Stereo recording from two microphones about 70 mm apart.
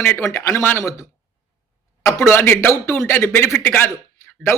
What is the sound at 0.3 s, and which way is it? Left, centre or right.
Speech, left.